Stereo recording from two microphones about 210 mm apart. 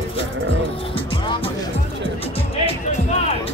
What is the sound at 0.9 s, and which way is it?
Music, 25° left (ahead or behind).